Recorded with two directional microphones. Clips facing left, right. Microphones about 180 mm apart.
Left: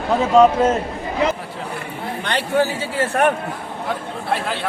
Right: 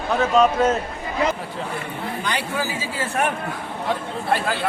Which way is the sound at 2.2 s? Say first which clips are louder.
Left 8 dB; 65° left (ahead or behind).